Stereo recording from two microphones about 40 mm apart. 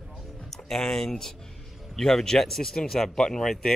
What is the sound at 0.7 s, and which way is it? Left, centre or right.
Speech, centre.